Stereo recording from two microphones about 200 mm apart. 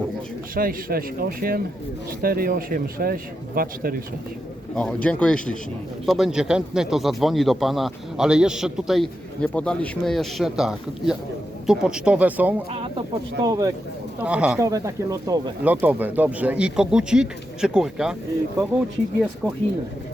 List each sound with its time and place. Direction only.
0.5 s speech: 45° right (ahead or behind)
4.7 s a man's voice: 5° left (ahead or behind)
12.7 s speech: 25° right (ahead or behind)
14.2 s a man's voice: 5° right (ahead or behind)
14.6 s speech: 15° right (ahead or behind)